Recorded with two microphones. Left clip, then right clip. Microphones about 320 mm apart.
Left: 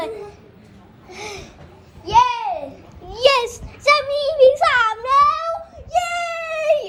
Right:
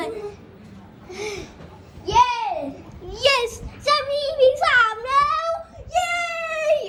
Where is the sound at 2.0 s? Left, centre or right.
Left.